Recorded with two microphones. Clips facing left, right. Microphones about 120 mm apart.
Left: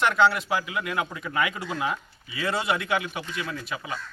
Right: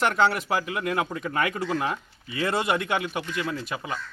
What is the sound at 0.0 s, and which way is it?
Speech, 45° right (ahead or behind).